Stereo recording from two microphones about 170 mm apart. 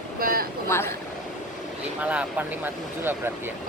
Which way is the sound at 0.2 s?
60° right (ahead or behind).